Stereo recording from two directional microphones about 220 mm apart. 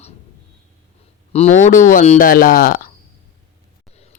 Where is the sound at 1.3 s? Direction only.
30° left (ahead or behind).